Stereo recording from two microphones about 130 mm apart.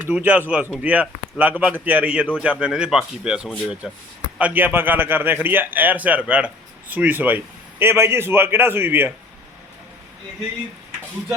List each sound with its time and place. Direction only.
0.0 s a man's voice: 15° right (ahead or behind)